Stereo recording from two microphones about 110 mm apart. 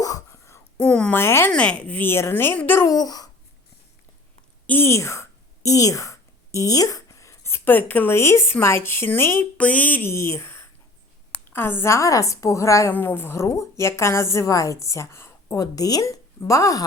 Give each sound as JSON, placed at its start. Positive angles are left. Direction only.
{"t": 0.0, "sound": "a sound", "side_deg": 30}
{"t": 0.8, "sound": "speech", "side_deg": 5}
{"t": 1.1, "sound": "a woman's voice", "side_deg": 20}
{"t": 1.5, "sound": "a woman's voice", "side_deg": 10}
{"t": 2.8, "sound": "speech", "side_deg": 35}
{"t": 4.6, "sound": "a woman's voice", "side_deg": 20}